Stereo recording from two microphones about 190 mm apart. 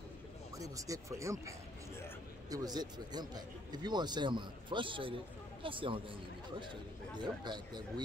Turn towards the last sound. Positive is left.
turn(degrees=-25)  # may be behind; listen again after turning